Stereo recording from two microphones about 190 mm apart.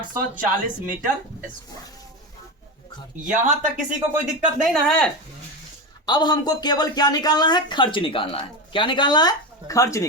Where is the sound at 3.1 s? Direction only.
40° right (ahead or behind).